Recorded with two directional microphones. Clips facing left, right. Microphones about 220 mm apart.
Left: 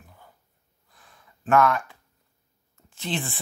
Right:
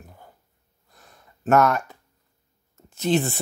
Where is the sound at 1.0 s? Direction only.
40° right (ahead or behind).